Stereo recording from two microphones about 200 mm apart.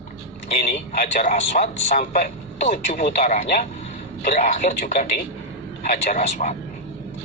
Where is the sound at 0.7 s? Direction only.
40° left (ahead or behind).